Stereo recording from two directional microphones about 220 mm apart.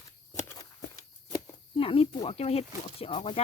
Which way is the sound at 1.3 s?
25° left (ahead or behind).